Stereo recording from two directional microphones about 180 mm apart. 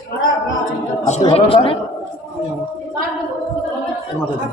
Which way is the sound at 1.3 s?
30° left (ahead or behind).